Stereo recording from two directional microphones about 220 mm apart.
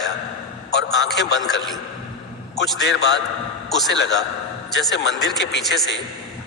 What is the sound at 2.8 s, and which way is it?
A man's voice, 50° left (ahead or behind).